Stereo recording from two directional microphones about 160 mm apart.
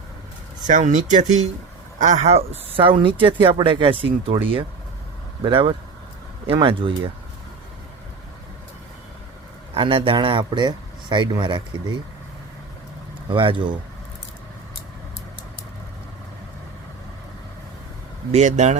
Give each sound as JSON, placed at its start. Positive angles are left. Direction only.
{"t": 0.7, "sound": "speech", "side_deg": -50}
{"t": 5.5, "sound": "speech", "side_deg": -35}
{"t": 9.7, "sound": "speech", "side_deg": -35}
{"t": 13.2, "sound": "speech", "side_deg": -35}
{"t": 18.3, "sound": "speech", "side_deg": -45}